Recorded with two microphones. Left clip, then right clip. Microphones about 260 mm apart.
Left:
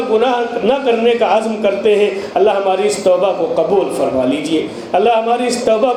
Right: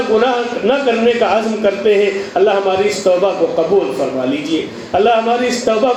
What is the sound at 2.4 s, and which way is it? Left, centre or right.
Speech, centre.